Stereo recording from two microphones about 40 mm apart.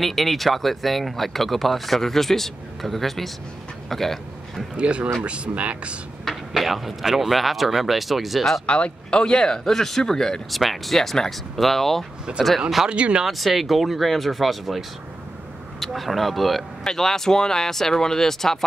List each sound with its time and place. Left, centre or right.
0.0 s speech: centre
4.7 s speech: right
6.2 s speech: centre
8.6 s speech: left
9.7 s speech: centre
10.5 s speech: centre
12.4 s speech: centre
12.9 s speech: right
13.2 s speech: centre